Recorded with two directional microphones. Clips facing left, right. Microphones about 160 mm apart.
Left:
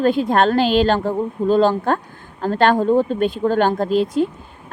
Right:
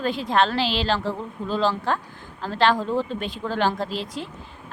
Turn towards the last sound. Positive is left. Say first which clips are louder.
# left 12 dB
turn(degrees=50)  # may be behind; listen again after turning